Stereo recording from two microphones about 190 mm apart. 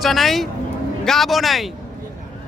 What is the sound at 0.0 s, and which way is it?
Speech, centre (ahead or behind).